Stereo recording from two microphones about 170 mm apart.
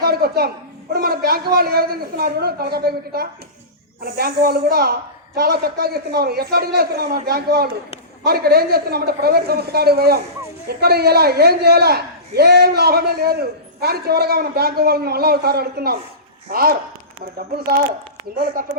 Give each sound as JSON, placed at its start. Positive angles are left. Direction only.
{"t": 0.0, "sound": "a sound", "side_deg": -65}
{"t": 0.9, "sound": "a woman's voice", "side_deg": -65}
{"t": 18.3, "sound": "a woman's voice", "side_deg": -55}